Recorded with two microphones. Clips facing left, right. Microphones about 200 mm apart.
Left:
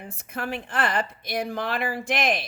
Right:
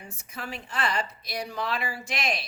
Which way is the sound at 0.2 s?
55° left (ahead or behind).